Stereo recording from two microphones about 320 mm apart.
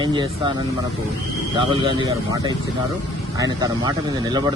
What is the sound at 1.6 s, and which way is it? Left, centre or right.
Speech, centre.